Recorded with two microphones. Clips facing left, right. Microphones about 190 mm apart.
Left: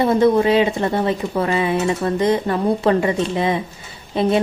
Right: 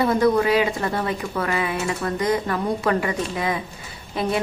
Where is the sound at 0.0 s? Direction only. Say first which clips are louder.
Left 4 dB; 25° left (ahead or behind).